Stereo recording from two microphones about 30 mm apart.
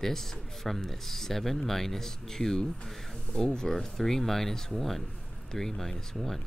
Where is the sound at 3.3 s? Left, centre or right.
Left.